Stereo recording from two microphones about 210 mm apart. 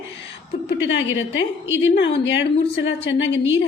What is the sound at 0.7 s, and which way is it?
A woman's voice, 60° left (ahead or behind).